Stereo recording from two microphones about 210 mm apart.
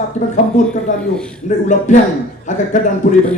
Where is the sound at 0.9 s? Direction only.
35° left (ahead or behind).